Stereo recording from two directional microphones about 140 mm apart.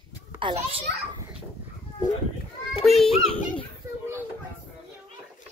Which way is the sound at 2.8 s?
Centre (ahead or behind).